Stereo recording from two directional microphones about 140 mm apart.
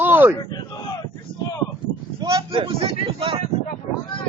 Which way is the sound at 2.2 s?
40° right (ahead or behind).